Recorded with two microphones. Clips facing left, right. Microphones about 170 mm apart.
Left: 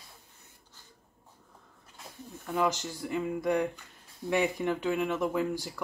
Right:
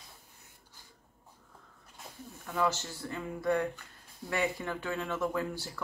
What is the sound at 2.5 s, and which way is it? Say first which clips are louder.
Speech: left 2 dB; 15° left (ahead or behind).